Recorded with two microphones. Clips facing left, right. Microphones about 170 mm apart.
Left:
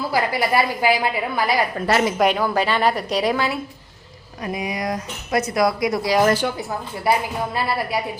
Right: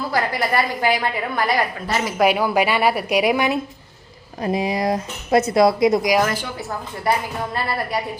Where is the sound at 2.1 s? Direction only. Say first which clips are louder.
Right 2 dB; 5° right (ahead or behind).